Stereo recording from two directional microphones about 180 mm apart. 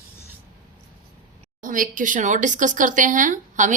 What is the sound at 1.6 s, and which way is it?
Speech, 50° right (ahead or behind).